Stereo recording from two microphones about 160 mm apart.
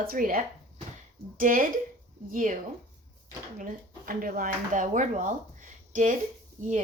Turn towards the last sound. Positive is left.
turn(degrees=-50)  # may be behind; listen again after turning